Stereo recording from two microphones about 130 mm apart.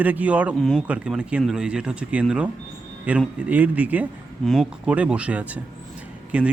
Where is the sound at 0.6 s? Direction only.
5° left (ahead or behind).